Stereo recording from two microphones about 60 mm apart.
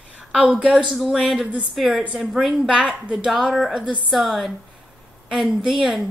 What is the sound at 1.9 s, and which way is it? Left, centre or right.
A woman's voice, centre.